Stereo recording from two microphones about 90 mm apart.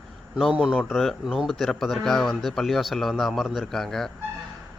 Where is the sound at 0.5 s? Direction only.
10° right (ahead or behind).